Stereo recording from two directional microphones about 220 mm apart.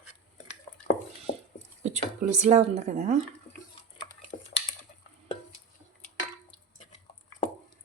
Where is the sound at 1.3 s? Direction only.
30° left (ahead or behind).